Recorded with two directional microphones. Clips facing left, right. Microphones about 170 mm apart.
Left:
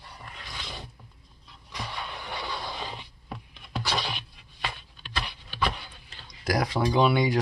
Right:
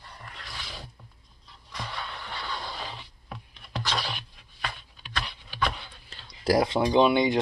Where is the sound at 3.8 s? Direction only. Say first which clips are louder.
Left 1 dB; 10° left (ahead or behind).